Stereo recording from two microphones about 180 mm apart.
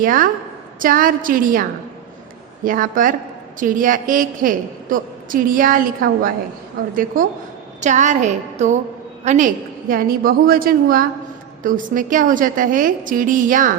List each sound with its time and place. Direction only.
0.0 s a woman's voice: 50° right (ahead or behind)
2.6 s a woman's voice: 50° right (ahead or behind)
7.8 s a woman's voice: 40° right (ahead or behind)
9.9 s a woman's voice: 55° right (ahead or behind)